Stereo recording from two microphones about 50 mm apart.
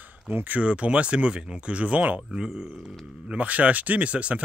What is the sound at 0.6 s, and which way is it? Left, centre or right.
Speech, right.